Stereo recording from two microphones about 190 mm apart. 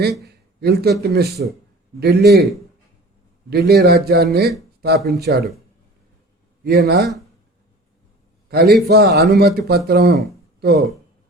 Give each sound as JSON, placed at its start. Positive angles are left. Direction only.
{"t": 0.0, "sound": "a man's voice", "side_deg": -55}
{"t": 3.5, "sound": "speech", "side_deg": -55}
{"t": 6.7, "sound": "speech", "side_deg": -60}
{"t": 8.4, "sound": "speech", "side_deg": -55}